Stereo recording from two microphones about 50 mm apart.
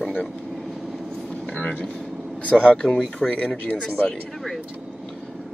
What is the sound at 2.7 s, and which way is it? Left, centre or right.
Speech, centre.